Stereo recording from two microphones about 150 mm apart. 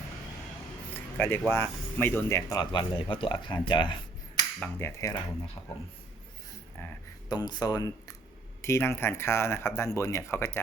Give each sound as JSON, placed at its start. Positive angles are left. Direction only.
{"t": 0.9, "sound": "speech", "side_deg": 15}
{"t": 2.5, "sound": "speech", "side_deg": 30}
{"t": 4.8, "sound": "speech", "side_deg": 20}
{"t": 7.3, "sound": "speech", "side_deg": 30}